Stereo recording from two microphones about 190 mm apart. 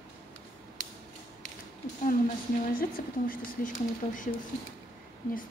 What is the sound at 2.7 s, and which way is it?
Speech, 50° left (ahead or behind).